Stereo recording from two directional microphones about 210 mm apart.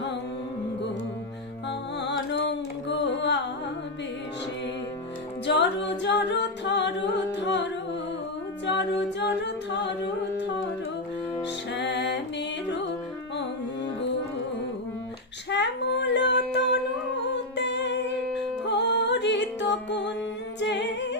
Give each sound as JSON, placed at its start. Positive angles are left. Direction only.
{"t": 2.0, "sound": "music", "side_deg": 55}
{"t": 5.5, "sound": "a capella", "side_deg": 55}
{"t": 11.7, "sound": "music", "side_deg": 55}
{"t": 15.4, "sound": "child singing", "side_deg": 55}
{"t": 17.6, "sound": "music", "side_deg": 55}
{"t": 20.6, "sound": "singing", "side_deg": 55}